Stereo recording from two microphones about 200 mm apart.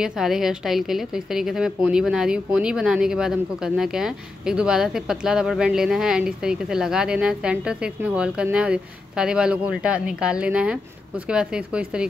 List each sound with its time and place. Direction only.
0.0 s a woman's voice: 5° right (ahead or behind)